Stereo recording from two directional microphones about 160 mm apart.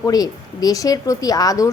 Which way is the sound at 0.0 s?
25° left (ahead or behind).